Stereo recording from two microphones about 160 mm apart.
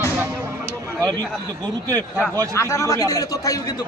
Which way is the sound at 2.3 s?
20° right (ahead or behind).